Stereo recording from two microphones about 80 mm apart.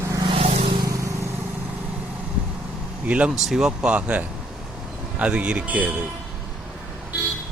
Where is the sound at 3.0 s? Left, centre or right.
Centre.